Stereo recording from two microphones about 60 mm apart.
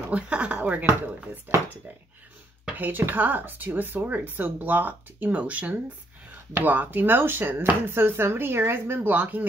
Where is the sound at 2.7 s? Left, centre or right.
Right.